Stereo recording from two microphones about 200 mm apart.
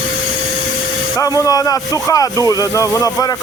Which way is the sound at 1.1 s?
15° left (ahead or behind).